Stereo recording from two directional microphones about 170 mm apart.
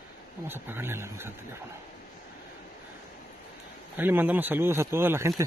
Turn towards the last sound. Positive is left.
turn(degrees=-15)  # may be behind; listen again after turning